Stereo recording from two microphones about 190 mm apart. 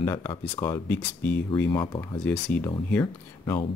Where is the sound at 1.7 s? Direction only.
25° left (ahead or behind).